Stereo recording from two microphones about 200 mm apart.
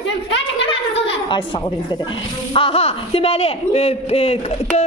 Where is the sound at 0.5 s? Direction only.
25° left (ahead or behind).